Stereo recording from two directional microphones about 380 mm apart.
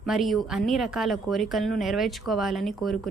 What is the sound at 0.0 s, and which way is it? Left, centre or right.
Speech, centre.